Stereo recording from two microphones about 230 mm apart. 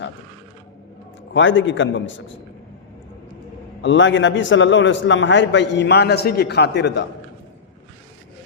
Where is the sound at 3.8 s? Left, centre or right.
Left.